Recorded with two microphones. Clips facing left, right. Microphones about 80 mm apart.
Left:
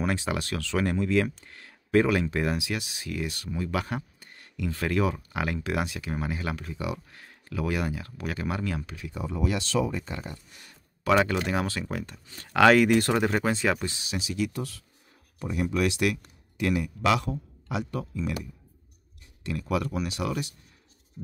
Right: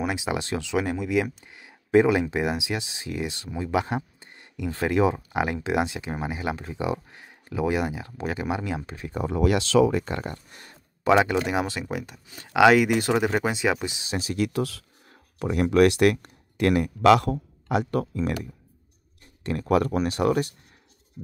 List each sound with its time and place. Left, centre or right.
0.0 s speech: centre
8.9 s speech: right
9.2 s speech: right
11.1 s speech: centre
14.0 s speech: right
14.5 s speech: right